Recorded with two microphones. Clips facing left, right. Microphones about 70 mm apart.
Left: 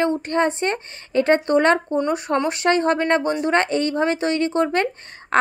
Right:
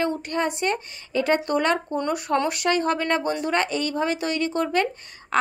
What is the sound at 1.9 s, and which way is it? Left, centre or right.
A woman's voice, left.